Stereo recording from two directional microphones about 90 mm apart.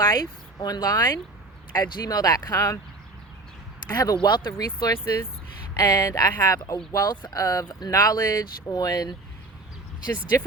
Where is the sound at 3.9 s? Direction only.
45° left (ahead or behind).